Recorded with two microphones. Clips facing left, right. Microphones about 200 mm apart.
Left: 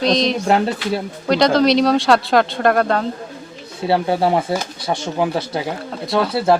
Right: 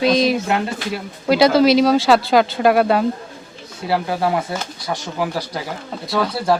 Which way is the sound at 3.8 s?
25° left (ahead or behind).